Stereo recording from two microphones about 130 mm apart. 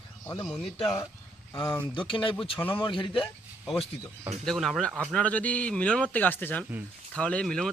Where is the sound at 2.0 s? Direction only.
40° left (ahead or behind).